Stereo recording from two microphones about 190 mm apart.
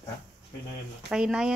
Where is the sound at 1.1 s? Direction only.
5° right (ahead or behind).